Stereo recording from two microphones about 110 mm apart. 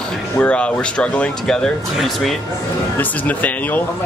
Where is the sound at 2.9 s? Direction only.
15° left (ahead or behind).